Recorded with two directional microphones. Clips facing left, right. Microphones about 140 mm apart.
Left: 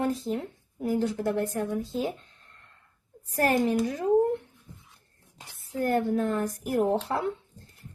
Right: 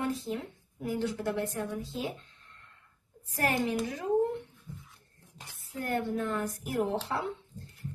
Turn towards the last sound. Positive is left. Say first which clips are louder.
# left 5 dB
turn(degrees=45)  # may be behind; listen again after turning